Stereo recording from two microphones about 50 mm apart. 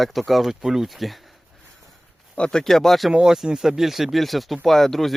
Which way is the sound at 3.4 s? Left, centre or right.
Centre.